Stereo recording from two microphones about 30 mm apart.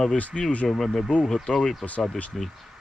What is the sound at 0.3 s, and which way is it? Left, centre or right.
Speech, centre.